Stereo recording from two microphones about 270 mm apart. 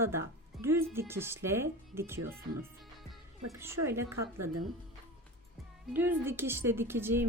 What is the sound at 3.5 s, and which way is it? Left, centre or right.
Speech, centre.